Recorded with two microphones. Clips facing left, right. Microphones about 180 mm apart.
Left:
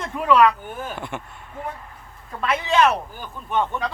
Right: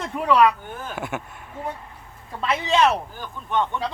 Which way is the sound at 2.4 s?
25° right (ahead or behind).